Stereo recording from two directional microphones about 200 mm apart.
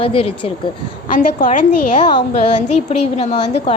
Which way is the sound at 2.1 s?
30° left (ahead or behind).